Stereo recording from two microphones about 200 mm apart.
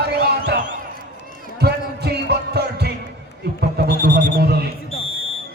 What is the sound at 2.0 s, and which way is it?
Music, 55° right (ahead or behind).